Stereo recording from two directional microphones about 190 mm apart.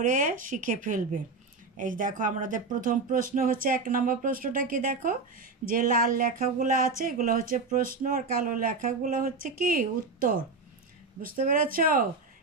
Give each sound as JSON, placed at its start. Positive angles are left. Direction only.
{"t": 0.0, "sound": "speech", "side_deg": -45}